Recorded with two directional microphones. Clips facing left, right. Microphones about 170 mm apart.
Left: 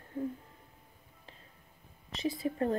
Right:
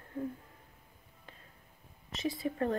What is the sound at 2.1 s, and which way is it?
Speech, 30° left (ahead or behind).